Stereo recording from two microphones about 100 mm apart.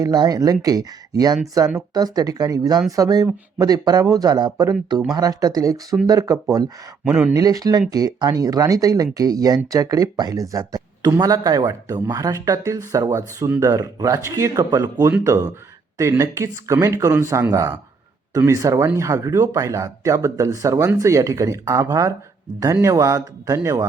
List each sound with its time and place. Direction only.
0.0 s speech: 40° right (ahead or behind)